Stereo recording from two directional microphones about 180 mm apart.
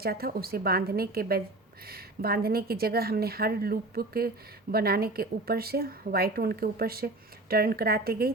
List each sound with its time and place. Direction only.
0.0 s speech: 55° right (ahead or behind)